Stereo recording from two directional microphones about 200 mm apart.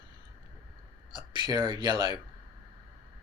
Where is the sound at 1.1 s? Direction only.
20° right (ahead or behind).